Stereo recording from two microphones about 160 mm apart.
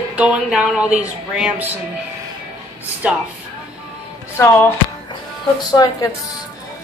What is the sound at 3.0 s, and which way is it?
Speech, 10° right (ahead or behind).